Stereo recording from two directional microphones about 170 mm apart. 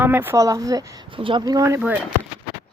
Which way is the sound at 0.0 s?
10° right (ahead or behind).